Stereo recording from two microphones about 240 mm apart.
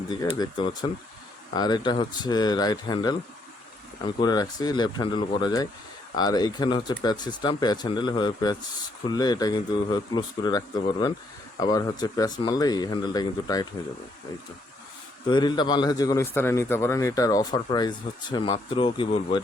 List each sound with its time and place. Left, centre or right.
0.1 s a man's voice: centre
15.3 s a man's voice: centre